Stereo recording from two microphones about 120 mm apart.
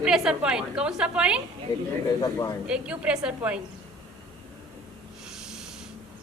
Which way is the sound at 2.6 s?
10° right (ahead or behind).